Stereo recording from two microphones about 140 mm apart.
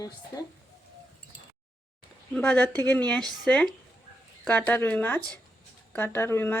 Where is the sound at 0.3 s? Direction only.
20° left (ahead or behind).